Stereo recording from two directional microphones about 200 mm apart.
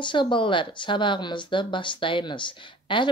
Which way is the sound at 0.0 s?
25° left (ahead or behind).